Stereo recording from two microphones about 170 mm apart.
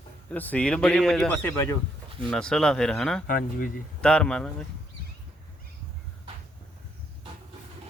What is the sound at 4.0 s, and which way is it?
Speech, 5° left (ahead or behind).